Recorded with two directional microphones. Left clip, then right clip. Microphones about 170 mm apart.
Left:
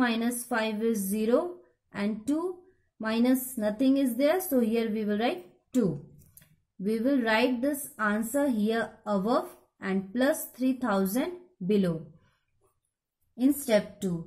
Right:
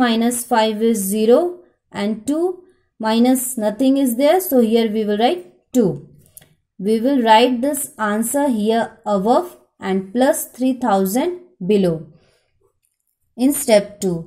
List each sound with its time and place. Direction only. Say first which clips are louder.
0.0 s a woman's voice: right 11 dB; 20° right (ahead or behind)
13.4 s a woman's voice: right 11 dB; 25° right (ahead or behind)